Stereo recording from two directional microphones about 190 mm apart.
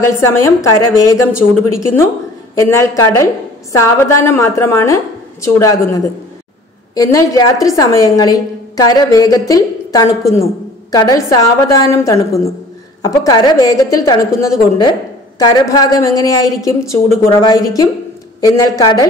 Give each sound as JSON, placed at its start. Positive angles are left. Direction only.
{"t": 0.0, "sound": "a woman's voice", "side_deg": 15}